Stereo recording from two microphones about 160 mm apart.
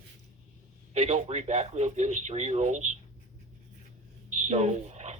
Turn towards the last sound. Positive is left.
turn(degrees=-45)  # may be behind; listen again after turning